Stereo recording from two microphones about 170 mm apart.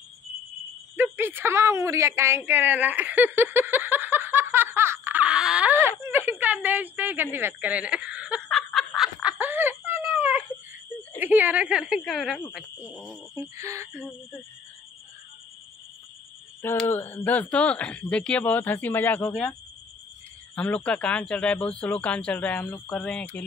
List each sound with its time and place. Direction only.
0.9 s a sound: 10° right (ahead or behind)
7.3 s speech: 10° right (ahead or behind)
8.4 s snicker: centre (ahead or behind)
11.1 s a woman's voice: 10° right (ahead or behind)
13.3 s speech: 15° right (ahead or behind)
16.8 s speech: 10° left (ahead or behind)
20.5 s speech: 5° left (ahead or behind)